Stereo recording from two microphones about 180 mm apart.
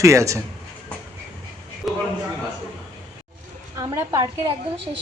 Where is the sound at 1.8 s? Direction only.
Centre (ahead or behind).